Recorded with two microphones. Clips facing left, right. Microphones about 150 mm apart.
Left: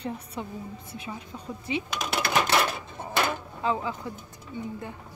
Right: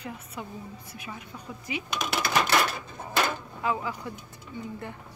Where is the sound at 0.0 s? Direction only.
30° left (ahead or behind).